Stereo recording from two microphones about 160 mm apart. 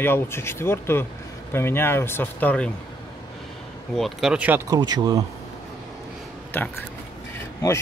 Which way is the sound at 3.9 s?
Centre (ahead or behind).